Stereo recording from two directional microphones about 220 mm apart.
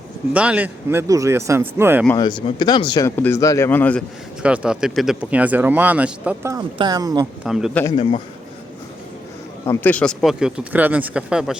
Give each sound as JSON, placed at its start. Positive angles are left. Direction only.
{"t": 0.3, "sound": "speech", "side_deg": -5}
{"t": 2.1, "sound": "a man's voice", "side_deg": 20}
{"t": 4.4, "sound": "speech", "side_deg": -5}
{"t": 7.4, "sound": "speech", "side_deg": 0}
{"t": 7.9, "sound": "speech", "side_deg": 25}
{"t": 9.6, "sound": "speech", "side_deg": 5}